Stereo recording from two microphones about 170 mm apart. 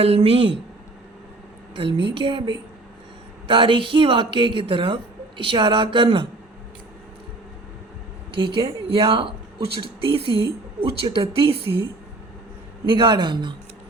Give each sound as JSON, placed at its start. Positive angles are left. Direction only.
{"t": 0.0, "sound": "a woman's voice", "side_deg": -35}
{"t": 1.7, "sound": "speech", "side_deg": -30}
{"t": 8.4, "sound": "a woman's voice", "side_deg": -30}
{"t": 12.8, "sound": "speech", "side_deg": -30}